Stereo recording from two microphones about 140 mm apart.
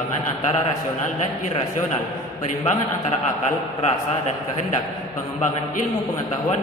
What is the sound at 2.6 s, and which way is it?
A man's voice, 55° left (ahead or behind).